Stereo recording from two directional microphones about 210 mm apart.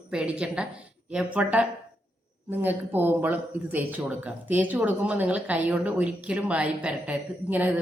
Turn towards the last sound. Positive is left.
turn(degrees=-10)  # may be behind; listen again after turning